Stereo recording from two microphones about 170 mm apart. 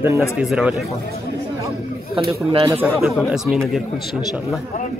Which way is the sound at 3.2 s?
Centre (ahead or behind).